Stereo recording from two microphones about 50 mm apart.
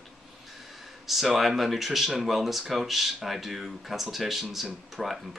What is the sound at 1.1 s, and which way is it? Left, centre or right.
Speech, centre.